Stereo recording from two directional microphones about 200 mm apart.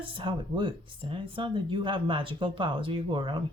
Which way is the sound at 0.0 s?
25° right (ahead or behind).